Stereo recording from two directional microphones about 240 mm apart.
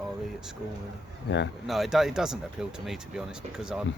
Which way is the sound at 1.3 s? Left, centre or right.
Left.